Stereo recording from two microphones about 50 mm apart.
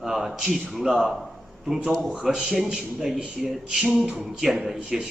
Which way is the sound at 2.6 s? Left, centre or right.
Centre.